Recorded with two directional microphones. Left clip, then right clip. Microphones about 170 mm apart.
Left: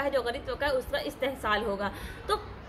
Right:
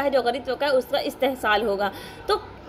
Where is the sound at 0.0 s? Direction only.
20° right (ahead or behind).